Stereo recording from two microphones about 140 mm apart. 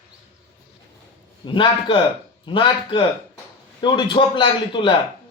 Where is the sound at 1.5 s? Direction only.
40° left (ahead or behind).